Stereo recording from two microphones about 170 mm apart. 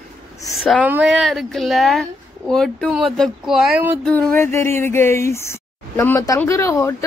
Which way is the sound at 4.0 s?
5° left (ahead or behind).